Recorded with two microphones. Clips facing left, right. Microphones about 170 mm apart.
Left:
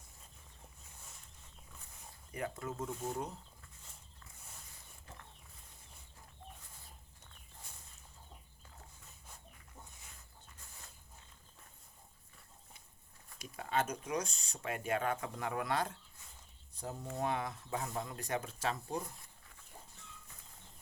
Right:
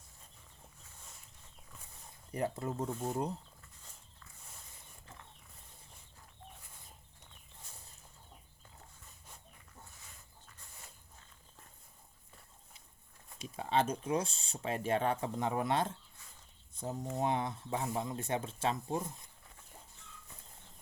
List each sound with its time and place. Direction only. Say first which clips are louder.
2.3 s speech: right 5 dB; 35° right (ahead or behind)
13.4 s speech: right 4 dB; 25° right (ahead or behind)